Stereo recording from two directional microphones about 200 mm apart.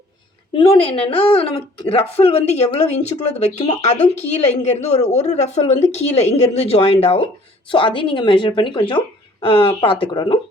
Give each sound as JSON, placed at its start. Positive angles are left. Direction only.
{"t": 0.5, "sound": "a woman's voice", "side_deg": 25}